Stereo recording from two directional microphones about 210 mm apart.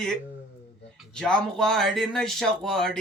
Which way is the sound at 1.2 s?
5° left (ahead or behind).